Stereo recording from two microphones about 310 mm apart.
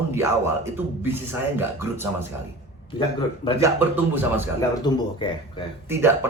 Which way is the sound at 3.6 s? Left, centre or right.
Centre.